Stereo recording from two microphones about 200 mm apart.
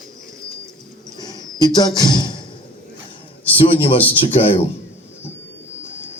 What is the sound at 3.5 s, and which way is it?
Speech, 25° left (ahead or behind).